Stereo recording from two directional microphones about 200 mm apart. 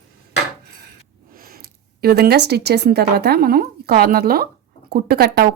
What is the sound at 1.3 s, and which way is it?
Speech, 45° right (ahead or behind).